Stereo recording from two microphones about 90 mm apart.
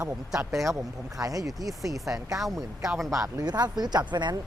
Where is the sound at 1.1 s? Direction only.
40° right (ahead or behind).